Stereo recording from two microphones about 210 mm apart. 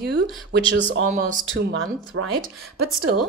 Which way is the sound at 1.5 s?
65° right (ahead or behind).